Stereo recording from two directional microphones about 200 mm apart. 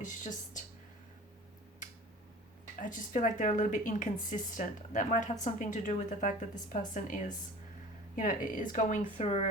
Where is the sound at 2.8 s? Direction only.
40° left (ahead or behind).